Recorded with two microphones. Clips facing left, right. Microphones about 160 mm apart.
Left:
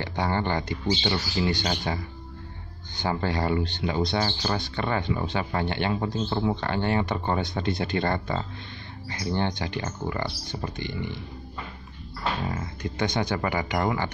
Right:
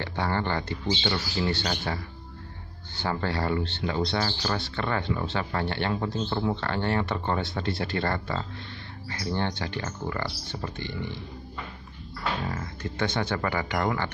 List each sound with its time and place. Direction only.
0.0 s speech: 15° left (ahead or behind)
3.0 s speech: 15° left (ahead or behind)
12.4 s speech: 15° left (ahead or behind)